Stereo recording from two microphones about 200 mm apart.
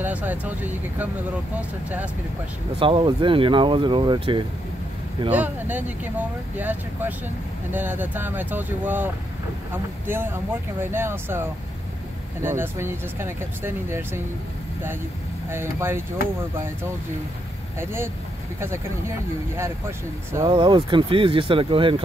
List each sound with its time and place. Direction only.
0.0 s speech: 10° right (ahead or behind)
2.8 s speech: 25° right (ahead or behind)
5.3 s speech: 10° right (ahead or behind)
15.5 s speech: 10° right (ahead or behind)
17.7 s speech: 10° right (ahead or behind)
20.3 s speech: 25° right (ahead or behind)